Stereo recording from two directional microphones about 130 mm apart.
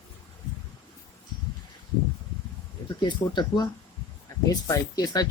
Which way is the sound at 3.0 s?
35° left (ahead or behind).